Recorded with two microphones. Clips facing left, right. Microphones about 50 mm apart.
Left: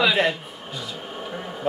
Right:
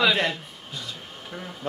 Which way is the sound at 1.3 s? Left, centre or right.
Centre.